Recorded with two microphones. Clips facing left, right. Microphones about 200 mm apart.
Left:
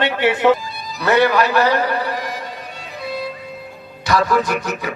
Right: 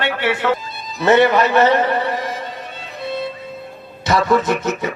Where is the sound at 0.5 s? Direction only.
20° right (ahead or behind).